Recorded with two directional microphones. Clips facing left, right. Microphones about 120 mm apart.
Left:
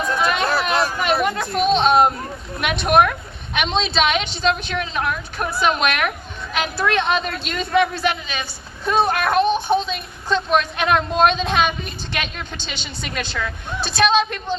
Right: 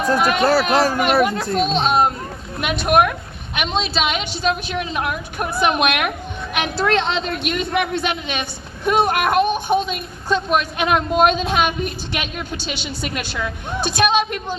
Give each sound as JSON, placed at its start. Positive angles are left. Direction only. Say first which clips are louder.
{"t": 0.0, "sound": "speech", "louder": "right 4 dB", "side_deg": -40}
{"t": 1.6, "sound": "a woman's voice", "louder": "left 4 dB", "side_deg": 0}